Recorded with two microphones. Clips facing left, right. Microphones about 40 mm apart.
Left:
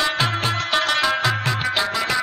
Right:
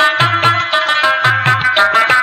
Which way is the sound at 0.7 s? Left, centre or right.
Right.